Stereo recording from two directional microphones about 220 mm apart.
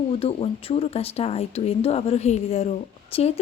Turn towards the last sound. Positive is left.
turn(degrees=30)  # may be behind; listen again after turning